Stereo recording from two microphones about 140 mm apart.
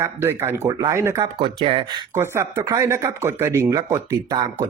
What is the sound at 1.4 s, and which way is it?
Speech, 40° right (ahead or behind).